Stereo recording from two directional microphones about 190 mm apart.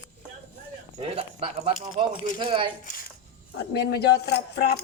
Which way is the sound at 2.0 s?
30° right (ahead or behind).